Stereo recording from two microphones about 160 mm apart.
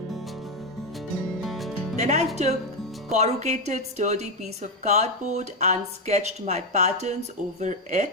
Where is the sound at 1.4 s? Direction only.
Centre (ahead or behind).